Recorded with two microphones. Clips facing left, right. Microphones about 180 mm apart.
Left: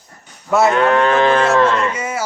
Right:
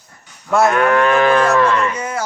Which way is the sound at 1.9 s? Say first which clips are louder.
Even; 5° left (ahead or behind).